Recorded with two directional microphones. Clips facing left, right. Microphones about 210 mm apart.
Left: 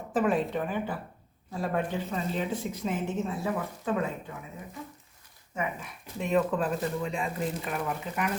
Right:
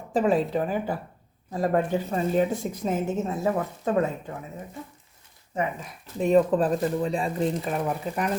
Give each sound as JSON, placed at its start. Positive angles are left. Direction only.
{"t": 0.2, "sound": "a woman's voice", "side_deg": -35}
{"t": 5.5, "sound": "speech", "side_deg": -35}